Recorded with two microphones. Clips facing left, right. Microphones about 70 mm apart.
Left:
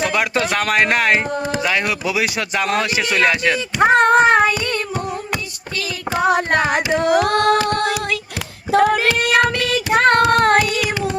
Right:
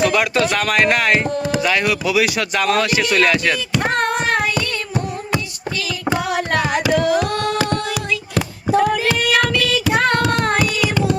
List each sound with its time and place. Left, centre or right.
0.0 s speech: left
1.4 s chop: left
1.8 s speech: left
4.0 s child singing: left
6.1 s music: left
7.1 s singing: left
7.7 s child singing: left
9.5 s child singing: left